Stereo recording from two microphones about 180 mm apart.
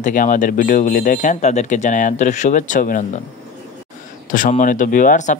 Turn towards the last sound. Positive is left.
turn(degrees=45)  # may be behind; listen again after turning